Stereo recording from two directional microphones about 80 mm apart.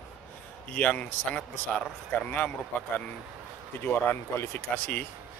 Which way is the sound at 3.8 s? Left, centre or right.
Left.